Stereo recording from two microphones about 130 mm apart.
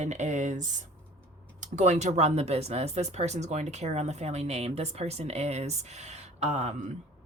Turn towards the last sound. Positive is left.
turn(degrees=-60)  # may be behind; listen again after turning